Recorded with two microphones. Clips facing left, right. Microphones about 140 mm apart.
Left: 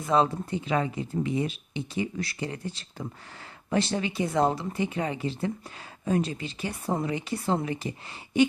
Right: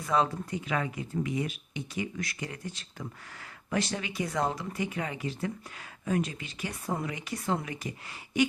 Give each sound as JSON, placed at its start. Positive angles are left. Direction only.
{"t": 0.0, "sound": "speech", "side_deg": 25}